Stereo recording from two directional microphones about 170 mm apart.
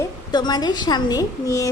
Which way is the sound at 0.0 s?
25° left (ahead or behind).